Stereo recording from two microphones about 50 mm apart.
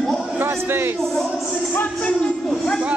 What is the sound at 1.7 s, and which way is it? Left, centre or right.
Speech, left.